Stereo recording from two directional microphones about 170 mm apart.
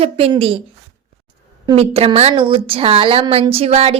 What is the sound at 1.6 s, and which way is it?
Speech, 35° right (ahead or behind).